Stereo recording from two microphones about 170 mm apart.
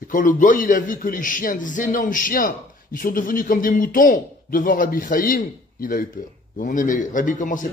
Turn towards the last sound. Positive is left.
turn(degrees=50)  # may be behind; listen again after turning